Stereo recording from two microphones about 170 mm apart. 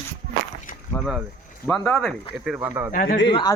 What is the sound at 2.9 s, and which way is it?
Speech, 60° left (ahead or behind).